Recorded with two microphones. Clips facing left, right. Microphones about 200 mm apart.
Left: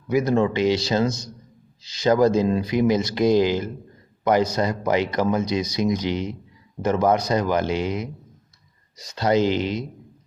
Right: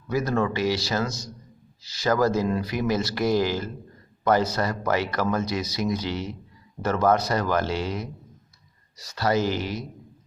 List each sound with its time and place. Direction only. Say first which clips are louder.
0.1 s a man's voice: left 5 dB; 15° left (ahead or behind)